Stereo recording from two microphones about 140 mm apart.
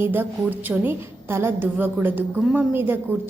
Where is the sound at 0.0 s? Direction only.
15° right (ahead or behind).